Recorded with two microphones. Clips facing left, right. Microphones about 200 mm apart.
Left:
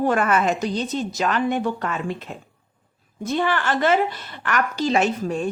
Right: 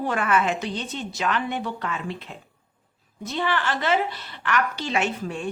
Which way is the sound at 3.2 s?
50° left (ahead or behind).